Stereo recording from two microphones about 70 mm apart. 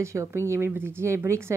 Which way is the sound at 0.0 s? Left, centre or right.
Right.